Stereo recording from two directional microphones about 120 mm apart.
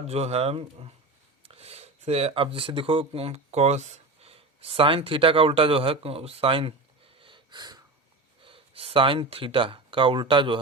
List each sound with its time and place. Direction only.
0.1 s speech: 60° right (ahead or behind)
7.2 s a sound: 45° right (ahead or behind)
8.4 s speech: 50° right (ahead or behind)